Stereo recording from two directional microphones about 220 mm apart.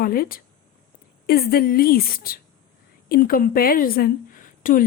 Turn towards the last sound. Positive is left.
turn(degrees=40)  # may be behind; listen again after turning